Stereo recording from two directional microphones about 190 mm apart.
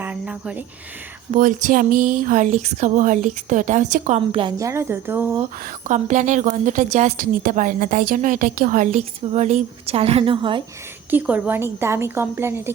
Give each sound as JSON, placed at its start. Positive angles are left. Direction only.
{"t": 0.0, "sound": "cricket", "side_deg": -5}
{"t": 1.4, "sound": "a woman's voice", "side_deg": -45}
{"t": 4.5, "sound": "a woman's voice", "side_deg": -15}
{"t": 5.9, "sound": "a woman's voice", "side_deg": -40}
{"t": 11.1, "sound": "a woman's voice", "side_deg": -10}